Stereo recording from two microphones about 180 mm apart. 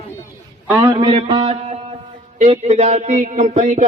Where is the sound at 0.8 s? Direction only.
25° right (ahead or behind).